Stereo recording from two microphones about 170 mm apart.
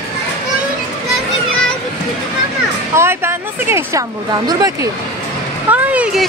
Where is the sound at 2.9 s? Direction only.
15° right (ahead or behind).